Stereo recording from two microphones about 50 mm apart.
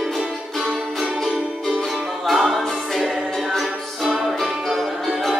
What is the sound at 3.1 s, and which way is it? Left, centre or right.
Music, centre.